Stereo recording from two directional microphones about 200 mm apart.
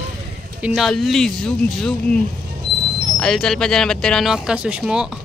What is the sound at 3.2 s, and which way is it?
Speech, 5° left (ahead or behind).